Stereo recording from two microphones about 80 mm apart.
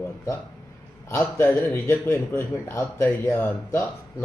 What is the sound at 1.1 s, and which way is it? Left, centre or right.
A man's voice, left.